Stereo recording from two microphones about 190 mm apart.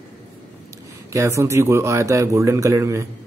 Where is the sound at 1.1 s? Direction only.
15° right (ahead or behind).